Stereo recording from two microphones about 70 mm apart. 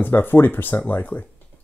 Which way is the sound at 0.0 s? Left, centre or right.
Left.